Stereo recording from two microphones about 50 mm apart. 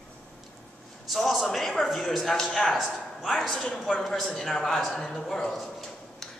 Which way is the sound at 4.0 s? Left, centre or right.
Centre.